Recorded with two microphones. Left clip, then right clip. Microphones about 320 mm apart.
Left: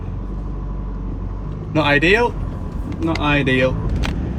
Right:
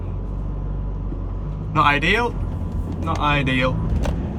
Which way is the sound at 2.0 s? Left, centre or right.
Centre.